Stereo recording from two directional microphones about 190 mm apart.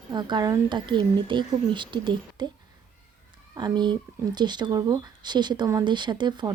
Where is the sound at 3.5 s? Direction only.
25° right (ahead or behind).